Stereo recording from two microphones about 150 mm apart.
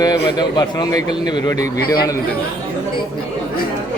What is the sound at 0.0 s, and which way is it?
A man's voice, 25° left (ahead or behind).